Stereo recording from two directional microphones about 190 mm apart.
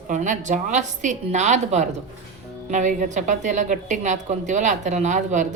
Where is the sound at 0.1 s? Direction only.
40° right (ahead or behind).